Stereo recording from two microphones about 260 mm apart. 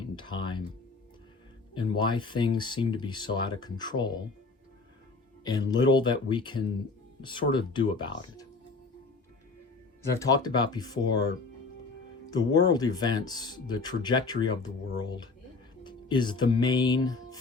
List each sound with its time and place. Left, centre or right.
0.0 s music: centre
1.7 s speech: centre
5.4 s speech: centre
10.0 s speech: centre
12.3 s speech: centre